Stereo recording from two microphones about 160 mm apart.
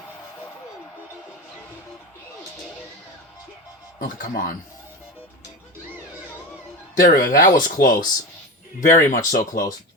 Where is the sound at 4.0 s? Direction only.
60° left (ahead or behind).